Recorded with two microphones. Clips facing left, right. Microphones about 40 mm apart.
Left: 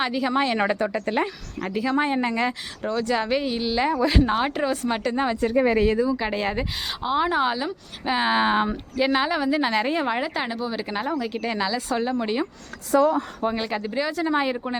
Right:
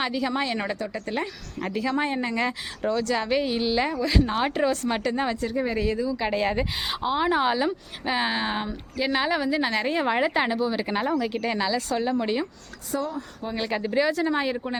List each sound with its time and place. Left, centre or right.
0.0 s speech: centre; by 1.1 s left
1.6 s speech: centre
3.9 s speech: centre
4.4 s speech: centre
5.4 s speech: left
6.1 s speech: centre
8.3 s speech: left
9.2 s speech: centre
10.2 s speech: centre
10.5 s speech: centre
13.0 s speech: left
13.6 s speech: centre